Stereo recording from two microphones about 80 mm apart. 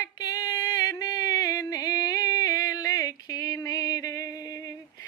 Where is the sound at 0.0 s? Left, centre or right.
Left.